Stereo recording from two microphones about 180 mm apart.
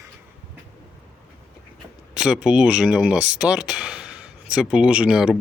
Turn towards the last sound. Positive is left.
turn(degrees=-5)  # may be behind; listen again after turning